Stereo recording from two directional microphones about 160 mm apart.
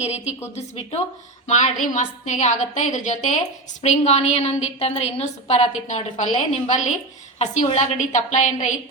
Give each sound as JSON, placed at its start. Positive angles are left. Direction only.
{"t": 0.0, "sound": "a woman's voice", "side_deg": 40}
{"t": 1.5, "sound": "a woman's voice", "side_deg": 45}